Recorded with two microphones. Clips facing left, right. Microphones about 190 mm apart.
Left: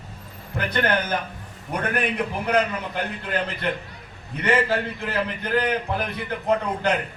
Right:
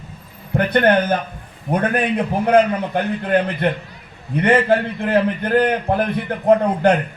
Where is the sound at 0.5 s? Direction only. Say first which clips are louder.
Right 8 dB; 55° right (ahead or behind).